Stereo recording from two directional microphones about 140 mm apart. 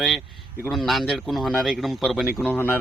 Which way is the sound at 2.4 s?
15° left (ahead or behind).